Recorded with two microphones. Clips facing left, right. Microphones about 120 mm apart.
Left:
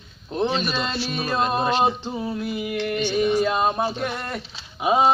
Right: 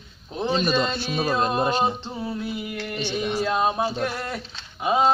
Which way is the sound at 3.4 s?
5° left (ahead or behind).